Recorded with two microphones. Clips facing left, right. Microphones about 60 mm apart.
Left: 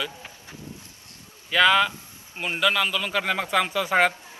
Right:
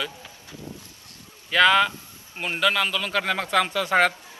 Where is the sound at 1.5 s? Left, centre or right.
Centre.